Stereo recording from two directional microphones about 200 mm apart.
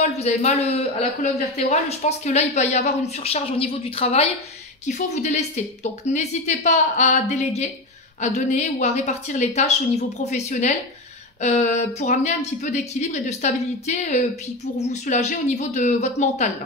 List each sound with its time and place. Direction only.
0.0 s a man's voice: 35° left (ahead or behind)